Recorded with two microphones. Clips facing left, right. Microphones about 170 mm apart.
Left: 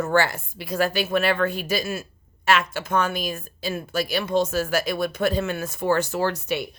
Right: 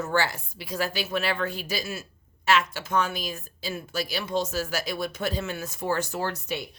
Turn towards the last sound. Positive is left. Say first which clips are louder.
# left 6 dB
turn(degrees=90)